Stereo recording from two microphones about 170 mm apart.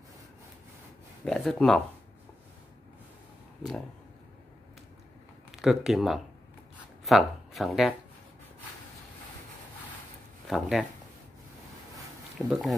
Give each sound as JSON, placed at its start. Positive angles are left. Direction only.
{"t": 1.2, "sound": "speech", "side_deg": 0}
{"t": 5.5, "sound": "speech", "side_deg": 0}
{"t": 10.5, "sound": "speech", "side_deg": 0}
{"t": 12.4, "sound": "speech", "side_deg": 0}